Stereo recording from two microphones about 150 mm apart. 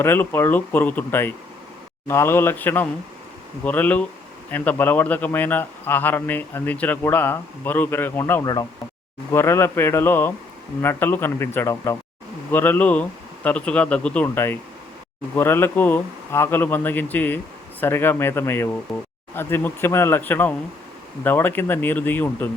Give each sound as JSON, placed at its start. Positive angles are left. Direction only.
{"t": 0.0, "sound": "a man's voice", "side_deg": 15}
{"t": 18.9, "sound": "speech", "side_deg": 0}
{"t": 19.3, "sound": "a man's voice", "side_deg": 15}